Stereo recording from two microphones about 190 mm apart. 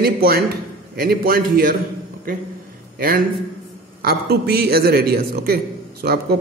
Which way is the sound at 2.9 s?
50° right (ahead or behind).